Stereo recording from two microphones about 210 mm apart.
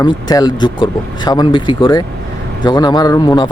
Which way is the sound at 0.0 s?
20° left (ahead or behind).